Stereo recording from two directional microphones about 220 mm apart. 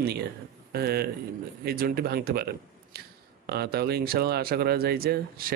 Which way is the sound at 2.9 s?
45° right (ahead or behind).